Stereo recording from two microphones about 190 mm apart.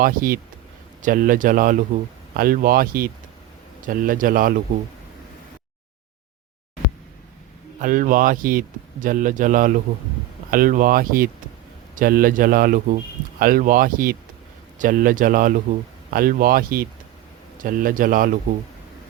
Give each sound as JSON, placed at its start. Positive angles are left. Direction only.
{"t": 0.0, "sound": "speech", "side_deg": -50}
{"t": 7.8, "sound": "speech", "side_deg": -45}